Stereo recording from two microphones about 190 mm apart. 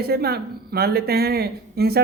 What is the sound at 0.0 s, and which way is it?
A woman's voice, 55° right (ahead or behind).